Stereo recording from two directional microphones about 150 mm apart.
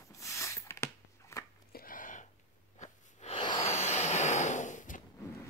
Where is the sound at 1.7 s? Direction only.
65° left (ahead or behind).